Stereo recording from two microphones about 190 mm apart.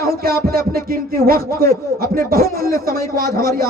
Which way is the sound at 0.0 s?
55° right (ahead or behind).